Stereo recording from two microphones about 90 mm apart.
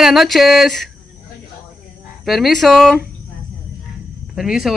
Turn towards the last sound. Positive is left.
turn(degrees=-5)  # may be behind; listen again after turning